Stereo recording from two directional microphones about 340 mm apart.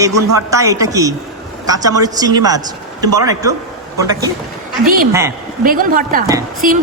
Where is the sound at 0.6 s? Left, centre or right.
Centre.